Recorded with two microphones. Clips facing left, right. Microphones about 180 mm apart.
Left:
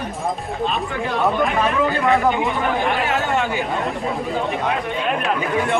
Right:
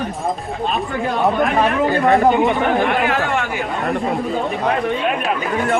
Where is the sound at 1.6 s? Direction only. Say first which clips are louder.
Right 3 dB; 40° right (ahead or behind).